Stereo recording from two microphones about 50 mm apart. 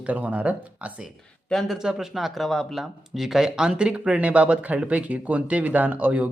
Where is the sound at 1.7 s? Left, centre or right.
Centre; by 6.3 s right.